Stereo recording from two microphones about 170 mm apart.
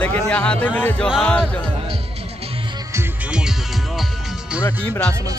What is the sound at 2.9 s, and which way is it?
Music, 10° right (ahead or behind).